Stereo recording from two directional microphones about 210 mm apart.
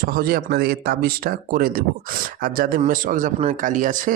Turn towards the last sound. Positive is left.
turn(degrees=-40)  # may be behind; listen again after turning